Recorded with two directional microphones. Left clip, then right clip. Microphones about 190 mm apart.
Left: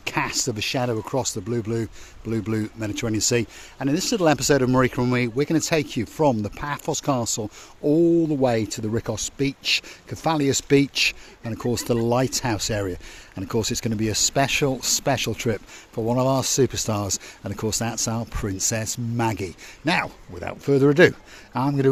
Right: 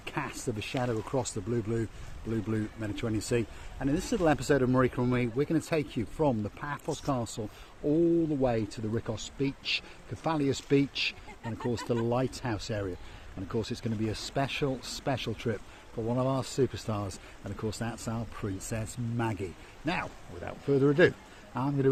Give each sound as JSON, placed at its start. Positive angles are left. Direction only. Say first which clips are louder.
{"t": 0.0, "sound": "speech", "louder": "left 11 dB", "side_deg": 65}
{"t": 2.3, "sound": "speech", "louder": "left 7 dB", "side_deg": 65}